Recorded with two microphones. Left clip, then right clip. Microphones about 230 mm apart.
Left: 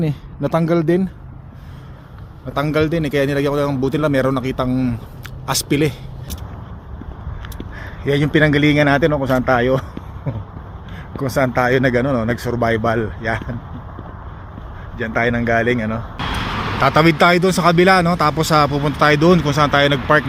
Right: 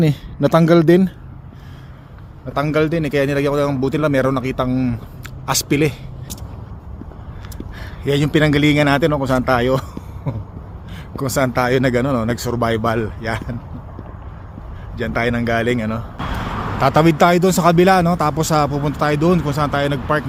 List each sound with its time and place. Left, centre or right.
0.0 s speech: right
2.5 s a man's voice: centre
7.8 s speech: centre
11.2 s speech: centre
14.9 s speech: centre
16.8 s a man's voice: centre